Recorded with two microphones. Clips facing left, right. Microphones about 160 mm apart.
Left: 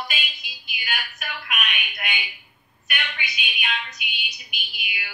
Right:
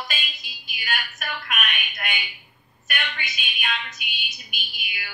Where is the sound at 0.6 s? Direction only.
45° right (ahead or behind).